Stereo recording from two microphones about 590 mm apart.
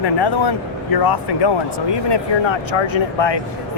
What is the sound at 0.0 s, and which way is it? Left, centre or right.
Speech, left.